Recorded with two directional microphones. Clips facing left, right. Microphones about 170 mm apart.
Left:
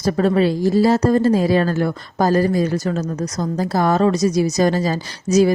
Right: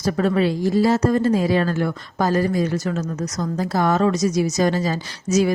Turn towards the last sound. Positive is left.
turn(degrees=35)  # may be behind; listen again after turning